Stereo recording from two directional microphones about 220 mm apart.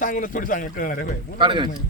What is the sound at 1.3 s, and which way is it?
Speech, 20° right (ahead or behind).